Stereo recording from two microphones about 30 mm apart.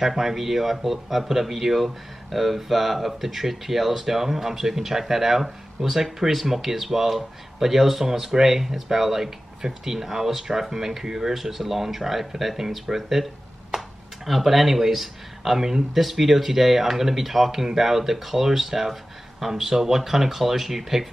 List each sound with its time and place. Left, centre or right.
0.0 s speech: centre
12.8 s speech: centre